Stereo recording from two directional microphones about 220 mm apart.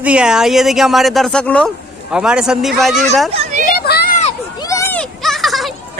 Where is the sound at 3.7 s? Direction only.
45° left (ahead or behind).